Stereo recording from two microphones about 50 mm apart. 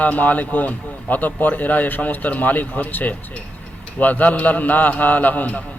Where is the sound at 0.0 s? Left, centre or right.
Left.